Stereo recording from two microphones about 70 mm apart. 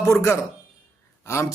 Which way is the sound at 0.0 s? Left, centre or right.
Left.